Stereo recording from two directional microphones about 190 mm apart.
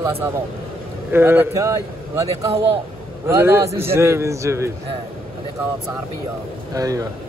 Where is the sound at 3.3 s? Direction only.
15° right (ahead or behind).